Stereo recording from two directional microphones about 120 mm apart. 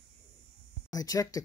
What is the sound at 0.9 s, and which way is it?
Speech, 30° left (ahead or behind).